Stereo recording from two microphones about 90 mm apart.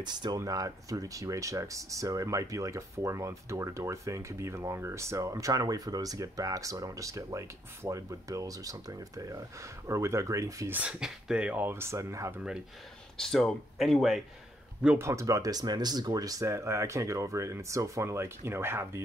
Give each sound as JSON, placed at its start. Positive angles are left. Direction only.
{"t": 0.0, "sound": "speech", "side_deg": -55}
{"t": 0.4, "sound": "speech", "side_deg": -40}
{"t": 10.7, "sound": "speech", "side_deg": -10}
{"t": 11.6, "sound": "speech", "side_deg": -25}
{"t": 13.2, "sound": "speech", "side_deg": 5}
{"t": 15.0, "sound": "speech", "side_deg": -35}